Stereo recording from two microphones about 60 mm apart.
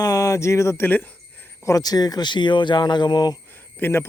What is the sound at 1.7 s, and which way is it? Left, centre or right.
Speech, left.